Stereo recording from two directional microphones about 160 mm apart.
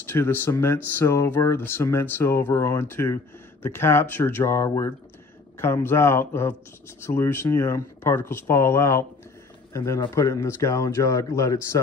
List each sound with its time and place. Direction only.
0.0 s a man's voice: 15° left (ahead or behind)